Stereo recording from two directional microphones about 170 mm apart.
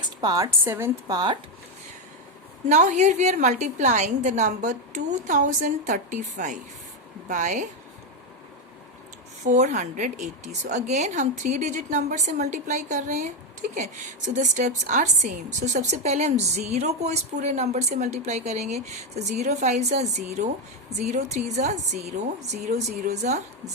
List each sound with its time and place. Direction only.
0.2 s speech: 20° right (ahead or behind)
2.6 s a woman's voice: 45° right (ahead or behind)
9.5 s a woman's voice: 45° right (ahead or behind)